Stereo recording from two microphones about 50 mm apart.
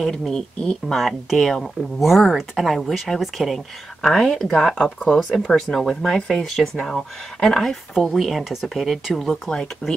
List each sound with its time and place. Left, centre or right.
0.0 s speech: centre
0.9 s speech: centre